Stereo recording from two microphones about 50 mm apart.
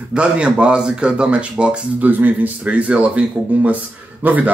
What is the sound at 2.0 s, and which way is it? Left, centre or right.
Speech, right.